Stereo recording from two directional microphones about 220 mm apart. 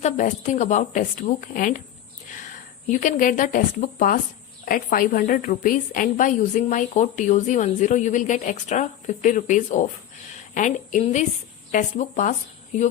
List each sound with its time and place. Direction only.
0.0 s a woman's voice: 35° left (ahead or behind)
2.8 s a woman's voice: 35° left (ahead or behind)